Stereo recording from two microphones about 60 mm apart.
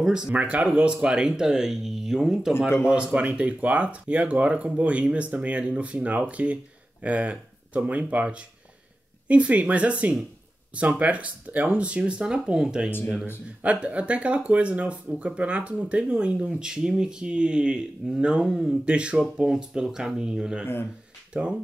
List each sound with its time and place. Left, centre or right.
0.0 s speech: centre
0.3 s speech: right; by 2.5 s centre
2.9 s speech: centre